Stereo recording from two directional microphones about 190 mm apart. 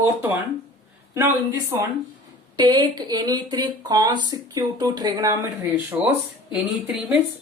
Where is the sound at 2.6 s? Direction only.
20° right (ahead or behind).